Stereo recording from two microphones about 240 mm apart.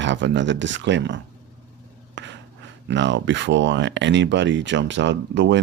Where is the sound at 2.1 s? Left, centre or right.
Right.